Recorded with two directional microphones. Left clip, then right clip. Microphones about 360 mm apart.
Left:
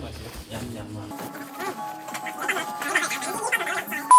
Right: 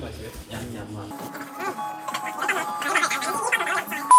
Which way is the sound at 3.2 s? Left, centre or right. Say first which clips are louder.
Right 2 dB; centre.